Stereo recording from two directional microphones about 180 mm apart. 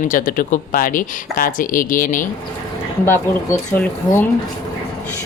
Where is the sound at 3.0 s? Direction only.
10° left (ahead or behind).